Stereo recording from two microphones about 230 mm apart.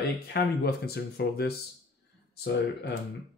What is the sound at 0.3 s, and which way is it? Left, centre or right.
Speech, left.